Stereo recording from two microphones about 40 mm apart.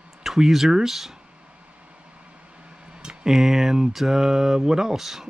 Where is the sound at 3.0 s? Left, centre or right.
Right.